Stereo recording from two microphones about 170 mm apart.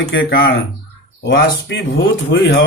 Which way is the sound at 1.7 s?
90° left.